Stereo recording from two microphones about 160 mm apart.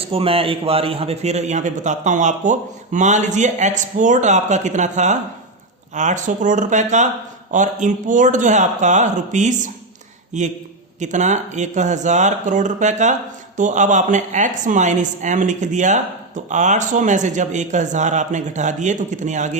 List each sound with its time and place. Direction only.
0.0 s a woman's voice: 35° right (ahead or behind)